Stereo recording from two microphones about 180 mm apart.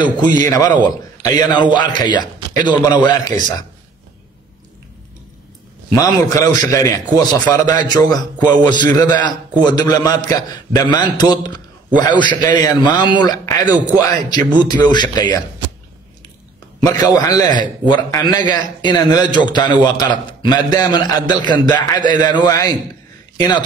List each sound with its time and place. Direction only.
0.0 s a man's voice: 25° left (ahead or behind)
5.9 s a man's voice: 20° left (ahead or behind)
16.8 s a man's voice: 20° left (ahead or behind)